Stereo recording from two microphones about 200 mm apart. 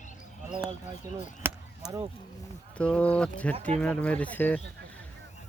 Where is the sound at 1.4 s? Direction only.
10° right (ahead or behind).